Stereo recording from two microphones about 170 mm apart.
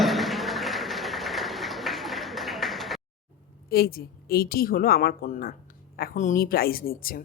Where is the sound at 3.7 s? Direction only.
65° left (ahead or behind).